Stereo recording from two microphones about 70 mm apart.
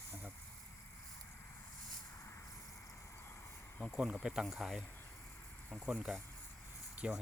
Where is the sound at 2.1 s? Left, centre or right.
Left.